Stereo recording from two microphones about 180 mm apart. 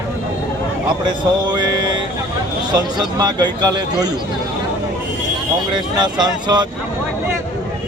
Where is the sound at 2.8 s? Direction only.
25° right (ahead or behind).